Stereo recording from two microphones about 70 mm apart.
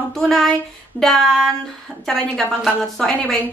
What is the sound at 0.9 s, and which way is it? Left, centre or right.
Speech, centre.